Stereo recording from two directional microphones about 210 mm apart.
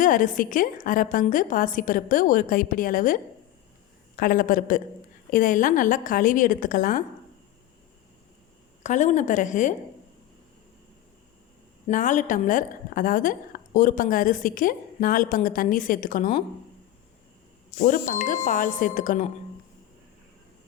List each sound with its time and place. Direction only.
0.0 s a woman's voice: 40° left (ahead or behind)
4.2 s a woman's voice: 40° left (ahead or behind)
8.8 s a woman's voice: 35° left (ahead or behind)
11.9 s a woman's voice: 35° left (ahead or behind)
17.7 s a woman's voice: 40° left (ahead or behind)